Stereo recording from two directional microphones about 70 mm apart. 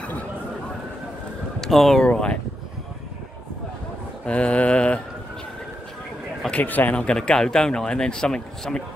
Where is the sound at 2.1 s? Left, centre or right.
Centre.